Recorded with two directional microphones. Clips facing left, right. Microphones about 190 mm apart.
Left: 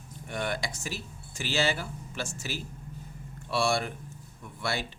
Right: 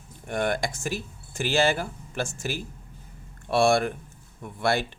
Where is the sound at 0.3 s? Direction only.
50° right (ahead or behind).